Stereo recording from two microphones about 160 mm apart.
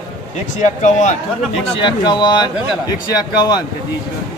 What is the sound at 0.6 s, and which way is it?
Speech, 50° left (ahead or behind).